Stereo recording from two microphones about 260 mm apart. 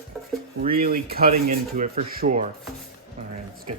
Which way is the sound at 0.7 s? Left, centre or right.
Right.